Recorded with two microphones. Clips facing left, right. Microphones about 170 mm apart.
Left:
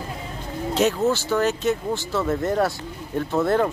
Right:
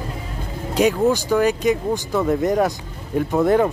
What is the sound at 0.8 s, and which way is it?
Speech, 10° right (ahead or behind).